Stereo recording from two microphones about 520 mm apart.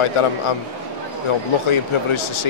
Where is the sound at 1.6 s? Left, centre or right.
Left.